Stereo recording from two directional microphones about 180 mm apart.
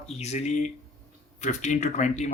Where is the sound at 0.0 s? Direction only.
35° left (ahead or behind).